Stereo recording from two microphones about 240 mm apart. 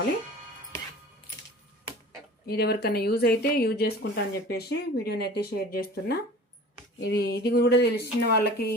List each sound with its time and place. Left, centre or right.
2.5 s speech: left